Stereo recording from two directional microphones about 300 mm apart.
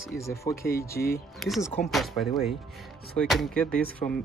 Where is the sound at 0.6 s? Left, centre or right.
Left.